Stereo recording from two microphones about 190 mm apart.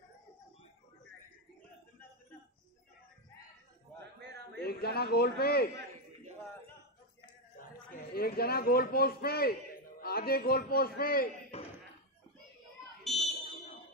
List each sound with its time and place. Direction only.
4.6 s a man's voice: 55° left (ahead or behind)
8.1 s a man's voice: 55° left (ahead or behind)
11.5 s a sound: 35° left (ahead or behind)
13.0 s fire alarm: centre (ahead or behind)